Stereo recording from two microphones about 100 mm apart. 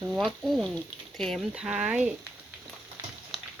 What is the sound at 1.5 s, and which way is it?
Speech, 10° right (ahead or behind).